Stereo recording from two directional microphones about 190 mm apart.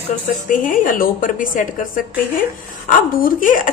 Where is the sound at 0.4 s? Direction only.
45° left (ahead or behind).